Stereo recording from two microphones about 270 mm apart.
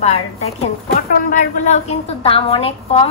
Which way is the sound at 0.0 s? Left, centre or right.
Left.